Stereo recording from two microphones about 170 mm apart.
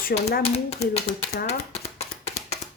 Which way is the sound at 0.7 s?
40° left (ahead or behind).